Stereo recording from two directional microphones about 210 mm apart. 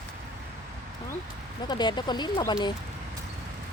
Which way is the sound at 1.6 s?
20° left (ahead or behind).